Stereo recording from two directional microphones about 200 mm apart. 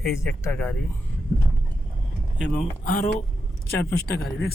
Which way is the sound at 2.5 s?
45° left (ahead or behind).